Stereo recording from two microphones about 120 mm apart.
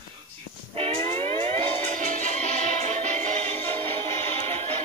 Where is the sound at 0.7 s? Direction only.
55° right (ahead or behind); by 3.5 s 85° right.